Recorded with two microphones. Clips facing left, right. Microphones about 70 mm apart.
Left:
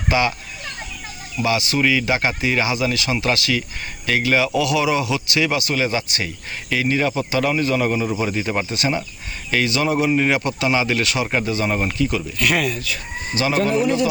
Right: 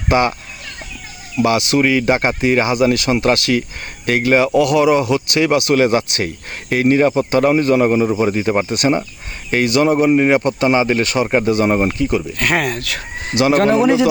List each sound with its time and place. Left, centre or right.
0.1 s speech: right
1.4 s speech: right
8.7 s speech: right